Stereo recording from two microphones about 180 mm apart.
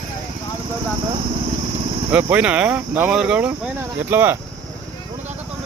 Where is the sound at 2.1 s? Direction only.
10° right (ahead or behind).